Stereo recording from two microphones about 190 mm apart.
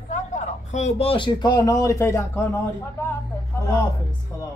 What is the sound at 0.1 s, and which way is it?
Speech, 40° left (ahead or behind).